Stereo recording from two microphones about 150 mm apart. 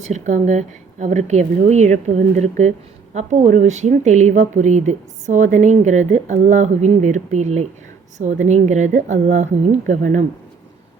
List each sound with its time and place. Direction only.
0.1 s a woman's voice: 55° right (ahead or behind)